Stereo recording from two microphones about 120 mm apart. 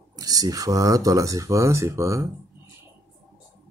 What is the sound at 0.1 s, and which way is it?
Speech, 30° right (ahead or behind).